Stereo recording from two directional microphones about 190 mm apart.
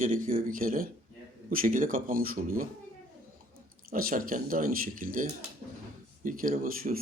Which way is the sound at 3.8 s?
45° right (ahead or behind).